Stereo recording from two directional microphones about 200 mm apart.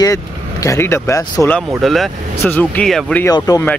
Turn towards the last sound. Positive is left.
turn(degrees=20)  # may be behind; listen again after turning